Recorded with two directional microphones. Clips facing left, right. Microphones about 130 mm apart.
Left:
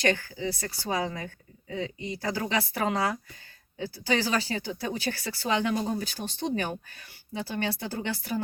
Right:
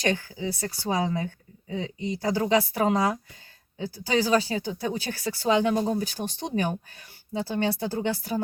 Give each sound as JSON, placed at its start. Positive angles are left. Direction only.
{"t": 0.1, "sound": "speech", "side_deg": -15}